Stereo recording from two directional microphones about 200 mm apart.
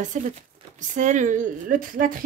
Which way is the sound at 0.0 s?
40° right (ahead or behind).